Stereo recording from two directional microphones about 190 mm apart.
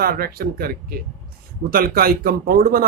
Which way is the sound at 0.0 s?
50° right (ahead or behind).